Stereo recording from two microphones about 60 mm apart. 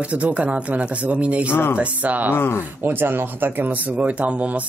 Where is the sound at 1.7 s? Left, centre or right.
Right.